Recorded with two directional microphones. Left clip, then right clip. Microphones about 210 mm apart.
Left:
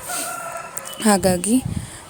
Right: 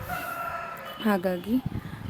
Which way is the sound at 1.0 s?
35° left (ahead or behind).